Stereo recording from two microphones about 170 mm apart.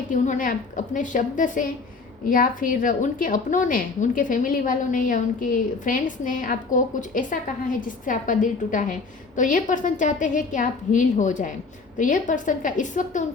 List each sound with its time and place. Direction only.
0.1 s a woman's voice: 50° left (ahead or behind)